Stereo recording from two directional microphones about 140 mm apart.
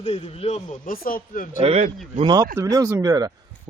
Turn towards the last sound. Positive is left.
turn(degrees=-25)  # may be behind; listen again after turning